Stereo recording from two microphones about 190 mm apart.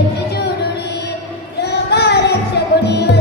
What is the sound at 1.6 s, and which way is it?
Music, 60° left (ahead or behind).